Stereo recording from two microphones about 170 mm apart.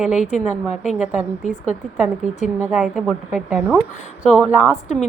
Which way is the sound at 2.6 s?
5° right (ahead or behind).